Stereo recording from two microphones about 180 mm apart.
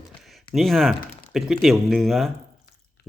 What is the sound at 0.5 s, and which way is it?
Speech, centre (ahead or behind).